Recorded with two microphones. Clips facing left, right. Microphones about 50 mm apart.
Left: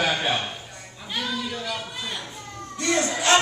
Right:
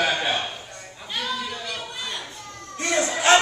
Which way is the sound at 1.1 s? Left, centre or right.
Centre.